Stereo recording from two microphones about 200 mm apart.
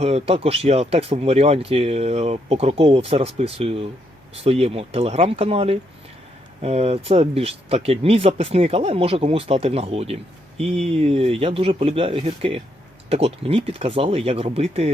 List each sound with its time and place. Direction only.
0.0 s speech: 30° right (ahead or behind)